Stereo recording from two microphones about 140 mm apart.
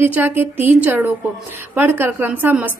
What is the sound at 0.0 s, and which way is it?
A woman's voice, 15° right (ahead or behind).